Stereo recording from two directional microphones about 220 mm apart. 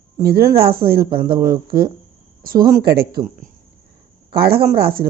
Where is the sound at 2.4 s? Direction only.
40° right (ahead or behind).